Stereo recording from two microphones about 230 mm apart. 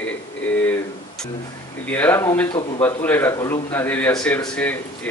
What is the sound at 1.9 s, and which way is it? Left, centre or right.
Speech, centre.